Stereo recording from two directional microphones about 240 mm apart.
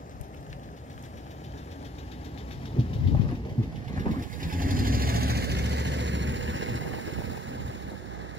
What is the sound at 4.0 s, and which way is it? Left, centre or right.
Vehicle, right.